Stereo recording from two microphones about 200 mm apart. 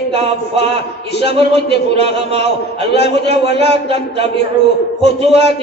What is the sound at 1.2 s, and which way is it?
A man's voice, 55° left (ahead or behind).